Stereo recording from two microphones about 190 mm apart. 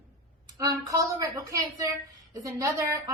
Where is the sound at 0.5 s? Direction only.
15° right (ahead or behind).